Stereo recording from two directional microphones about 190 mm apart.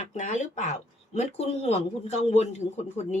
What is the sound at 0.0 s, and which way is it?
Speech, 40° left (ahead or behind).